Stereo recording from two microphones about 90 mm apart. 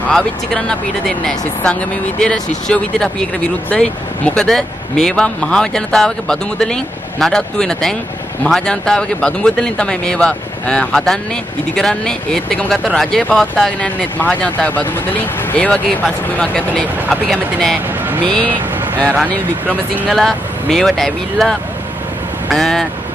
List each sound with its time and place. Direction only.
0.1 s speech: 10° left (ahead or behind)
13.8 s speech: 20° left (ahead or behind)
20.1 s speech: 5° left (ahead or behind)